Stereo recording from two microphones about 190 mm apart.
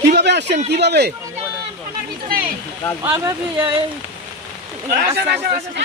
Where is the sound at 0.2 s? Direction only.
65° right (ahead or behind).